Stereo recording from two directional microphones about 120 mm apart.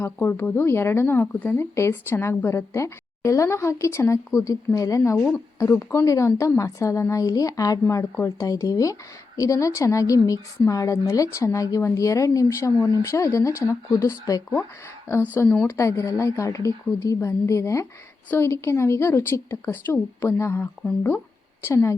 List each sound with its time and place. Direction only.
0.0 s speech: 20° left (ahead or behind)